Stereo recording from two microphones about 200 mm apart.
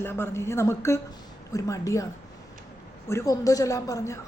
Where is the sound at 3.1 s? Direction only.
15° left (ahead or behind).